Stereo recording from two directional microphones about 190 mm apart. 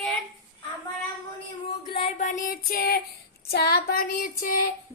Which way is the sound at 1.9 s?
35° left (ahead or behind).